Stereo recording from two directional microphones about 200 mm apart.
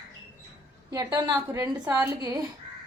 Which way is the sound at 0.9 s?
20° right (ahead or behind).